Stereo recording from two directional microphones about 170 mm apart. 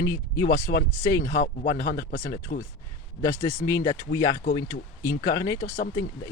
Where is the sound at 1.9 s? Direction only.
60° left (ahead or behind).